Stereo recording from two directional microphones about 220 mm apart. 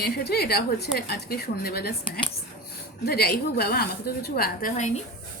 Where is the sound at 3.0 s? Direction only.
45° left (ahead or behind).